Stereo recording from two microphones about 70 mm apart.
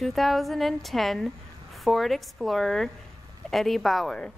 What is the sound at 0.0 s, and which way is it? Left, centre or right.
A woman's voice, centre.